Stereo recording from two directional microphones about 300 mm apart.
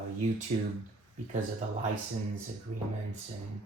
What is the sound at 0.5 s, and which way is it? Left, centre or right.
Speech, right.